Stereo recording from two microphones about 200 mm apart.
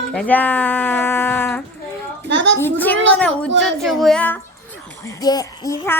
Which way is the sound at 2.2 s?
60° right (ahead or behind).